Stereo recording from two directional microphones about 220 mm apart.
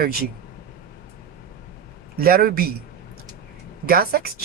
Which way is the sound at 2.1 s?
45° right (ahead or behind).